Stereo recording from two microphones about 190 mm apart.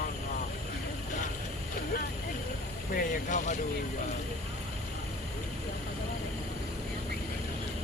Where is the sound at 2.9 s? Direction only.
40° left (ahead or behind).